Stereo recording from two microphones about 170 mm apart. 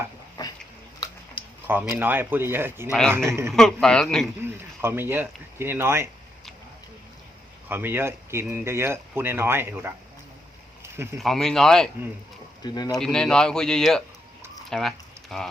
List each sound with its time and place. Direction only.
0.4 s dog: 25° left (ahead or behind)
1.4 s speech: 10° right (ahead or behind)
3.5 s speech: 5° left (ahead or behind)
4.4 s speech: 15° right (ahead or behind)
7.7 s speech: 10° right (ahead or behind)
10.8 s a sound: 15° right (ahead or behind)
11.2 s speech: centre (ahead or behind)
12.6 s speech: 25° left (ahead or behind)
13.0 s speech: 5° left (ahead or behind)
14.7 s a sound: centre (ahead or behind)